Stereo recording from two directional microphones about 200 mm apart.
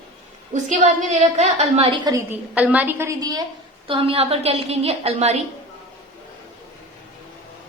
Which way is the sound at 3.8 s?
25° right (ahead or behind).